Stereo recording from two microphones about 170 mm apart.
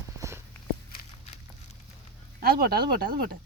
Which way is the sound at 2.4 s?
60° right (ahead or behind).